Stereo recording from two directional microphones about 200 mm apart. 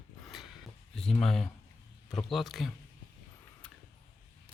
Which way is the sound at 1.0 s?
5° left (ahead or behind).